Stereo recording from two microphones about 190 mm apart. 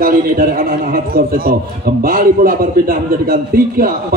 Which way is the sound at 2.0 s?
50° right (ahead or behind).